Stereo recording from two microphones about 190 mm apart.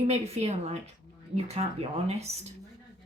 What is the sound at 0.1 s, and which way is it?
Speech, 35° right (ahead or behind).